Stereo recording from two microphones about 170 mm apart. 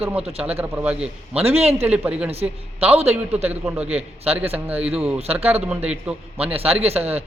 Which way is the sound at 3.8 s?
35° right (ahead or behind).